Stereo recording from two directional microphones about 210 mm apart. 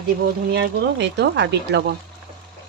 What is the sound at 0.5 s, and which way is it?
Speech, 55° right (ahead or behind).